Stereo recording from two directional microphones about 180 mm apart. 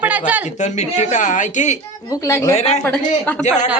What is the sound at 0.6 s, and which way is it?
Speech, 40° left (ahead or behind).